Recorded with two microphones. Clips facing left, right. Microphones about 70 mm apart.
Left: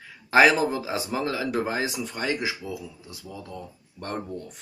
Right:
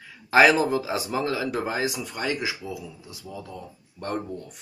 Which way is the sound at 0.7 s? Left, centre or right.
Left.